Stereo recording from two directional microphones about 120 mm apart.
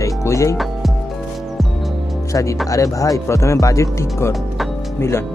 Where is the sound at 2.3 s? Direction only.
25° left (ahead or behind).